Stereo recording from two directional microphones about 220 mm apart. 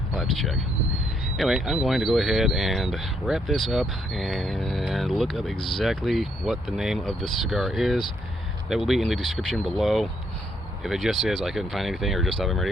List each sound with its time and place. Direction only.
0.1 s speech: centre (ahead or behind)